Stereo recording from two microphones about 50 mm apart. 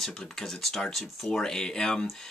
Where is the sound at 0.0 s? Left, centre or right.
Centre.